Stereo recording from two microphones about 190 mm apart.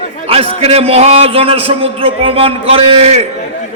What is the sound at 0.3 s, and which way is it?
A man's voice, 30° right (ahead or behind).